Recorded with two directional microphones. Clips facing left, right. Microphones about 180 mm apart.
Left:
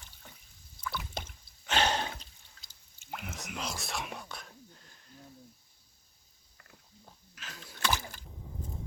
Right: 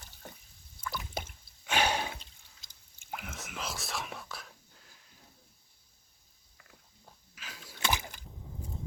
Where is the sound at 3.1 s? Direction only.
Centre (ahead or behind).